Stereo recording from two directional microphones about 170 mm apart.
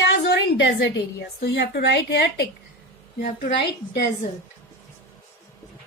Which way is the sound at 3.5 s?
80° left.